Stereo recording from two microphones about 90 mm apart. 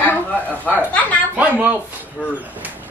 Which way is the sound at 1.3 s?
15° right (ahead or behind).